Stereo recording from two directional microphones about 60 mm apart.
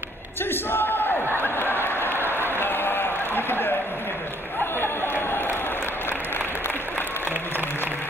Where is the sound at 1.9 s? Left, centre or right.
Left.